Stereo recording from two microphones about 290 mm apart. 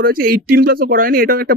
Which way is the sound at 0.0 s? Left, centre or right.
Right.